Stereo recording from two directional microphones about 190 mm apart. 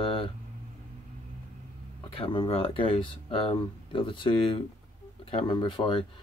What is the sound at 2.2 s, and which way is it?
Speech, 30° left (ahead or behind).